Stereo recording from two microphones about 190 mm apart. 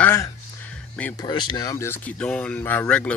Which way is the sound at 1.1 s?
20° left (ahead or behind).